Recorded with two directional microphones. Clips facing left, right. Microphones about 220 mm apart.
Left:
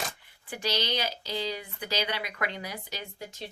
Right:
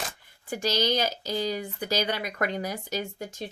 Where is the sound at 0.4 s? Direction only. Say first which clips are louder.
Right 5 dB; 45° right (ahead or behind).